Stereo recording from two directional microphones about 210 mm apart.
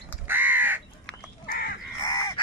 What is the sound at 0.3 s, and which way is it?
Crow, 10° right (ahead or behind).